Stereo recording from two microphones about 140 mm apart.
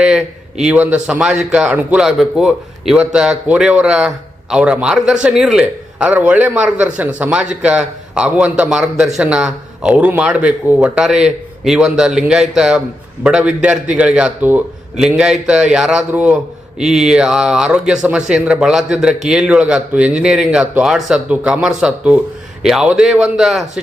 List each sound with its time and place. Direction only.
0.0 s a man's voice: 5° right (ahead or behind)